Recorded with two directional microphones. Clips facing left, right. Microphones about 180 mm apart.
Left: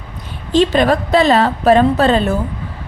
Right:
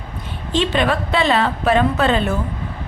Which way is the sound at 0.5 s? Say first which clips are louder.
Left 6 dB; 40° left (ahead or behind).